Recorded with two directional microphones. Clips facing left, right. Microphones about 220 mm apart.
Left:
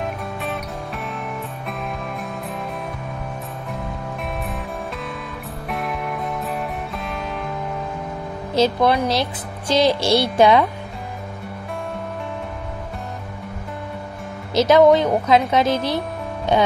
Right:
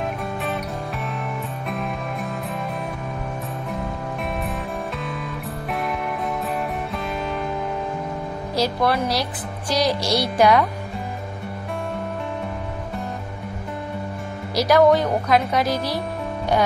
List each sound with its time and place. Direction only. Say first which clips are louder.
5.7 s music: even; centre (ahead or behind)
8.5 s speech: left 4 dB; 20° left (ahead or behind)
14.5 s speech: left 3 dB; 25° left (ahead or behind)